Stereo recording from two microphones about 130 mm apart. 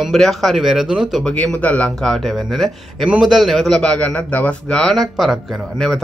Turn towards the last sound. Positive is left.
turn(degrees=0)  # may be behind; listen again after turning